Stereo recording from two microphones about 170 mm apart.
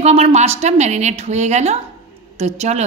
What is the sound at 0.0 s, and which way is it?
A woman's voice, 40° right (ahead or behind).